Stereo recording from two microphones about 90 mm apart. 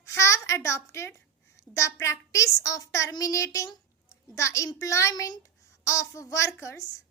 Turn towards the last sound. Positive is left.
turn(degrees=35)  # may be behind; listen again after turning